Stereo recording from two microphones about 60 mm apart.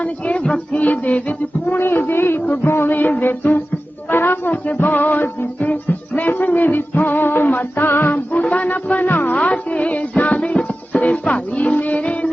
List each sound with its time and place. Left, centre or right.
0.0 s music: left
1.8 s music: left
9.3 s music: left